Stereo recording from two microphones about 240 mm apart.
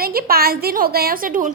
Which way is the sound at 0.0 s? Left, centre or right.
Right.